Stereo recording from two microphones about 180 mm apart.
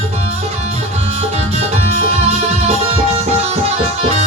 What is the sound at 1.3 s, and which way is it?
Music, 35° right (ahead or behind).